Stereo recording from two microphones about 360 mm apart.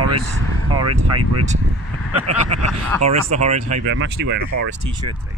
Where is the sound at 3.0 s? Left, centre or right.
Centre.